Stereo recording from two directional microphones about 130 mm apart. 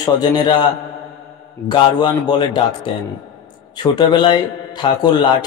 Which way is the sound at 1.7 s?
35° left (ahead or behind).